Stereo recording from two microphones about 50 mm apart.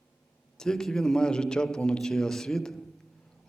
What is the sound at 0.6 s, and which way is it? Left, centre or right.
A man's voice, centre.